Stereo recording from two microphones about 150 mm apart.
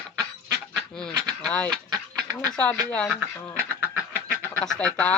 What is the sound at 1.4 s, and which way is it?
Speech, 10° left (ahead or behind).